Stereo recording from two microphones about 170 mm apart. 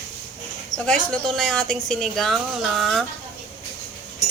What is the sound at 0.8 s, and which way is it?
A woman's voice, 5° left (ahead or behind).